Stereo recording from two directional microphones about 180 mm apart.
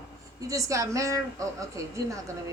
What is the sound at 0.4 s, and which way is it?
A woman's voice, 20° right (ahead or behind).